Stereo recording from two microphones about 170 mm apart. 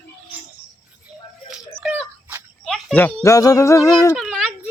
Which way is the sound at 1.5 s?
5° right (ahead or behind).